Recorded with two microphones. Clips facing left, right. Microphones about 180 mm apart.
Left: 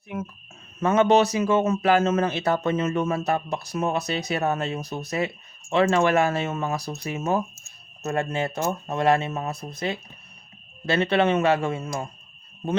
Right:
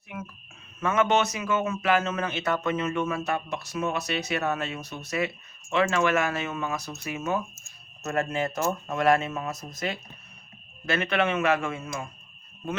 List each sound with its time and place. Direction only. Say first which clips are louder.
0.8 s a man's voice: left 5 dB; 35° left (ahead or behind)